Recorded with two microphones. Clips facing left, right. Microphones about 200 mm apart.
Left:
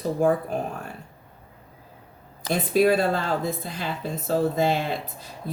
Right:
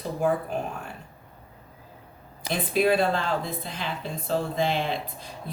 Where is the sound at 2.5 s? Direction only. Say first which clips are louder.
Left 3 dB; 45° left (ahead or behind).